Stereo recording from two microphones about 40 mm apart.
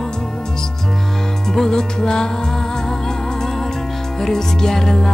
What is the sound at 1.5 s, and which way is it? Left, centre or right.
Music, centre.